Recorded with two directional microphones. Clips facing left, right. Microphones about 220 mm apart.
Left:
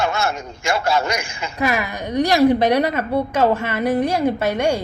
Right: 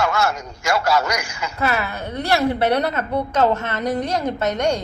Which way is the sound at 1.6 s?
15° left (ahead or behind).